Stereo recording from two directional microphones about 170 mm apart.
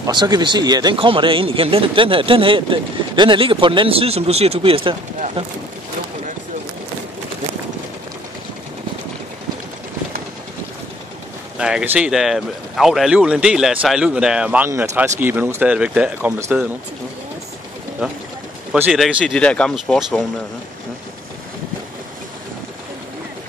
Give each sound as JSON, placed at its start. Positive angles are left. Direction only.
{"t": 0.0, "sound": "speech", "side_deg": -25}
{"t": 11.5, "sound": "speech", "side_deg": -5}
{"t": 18.7, "sound": "speech", "side_deg": -5}